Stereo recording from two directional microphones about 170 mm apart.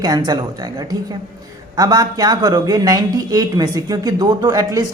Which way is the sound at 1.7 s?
20° right (ahead or behind).